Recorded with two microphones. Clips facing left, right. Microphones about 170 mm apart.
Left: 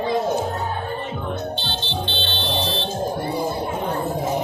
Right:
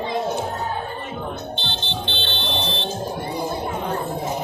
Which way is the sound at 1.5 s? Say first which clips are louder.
Left 2 dB; 20° right (ahead or behind).